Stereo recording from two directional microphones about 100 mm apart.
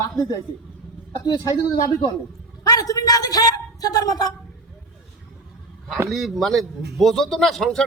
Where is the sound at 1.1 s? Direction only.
40° left (ahead or behind).